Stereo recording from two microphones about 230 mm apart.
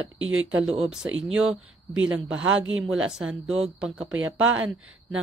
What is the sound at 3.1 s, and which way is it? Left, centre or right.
Speech, centre.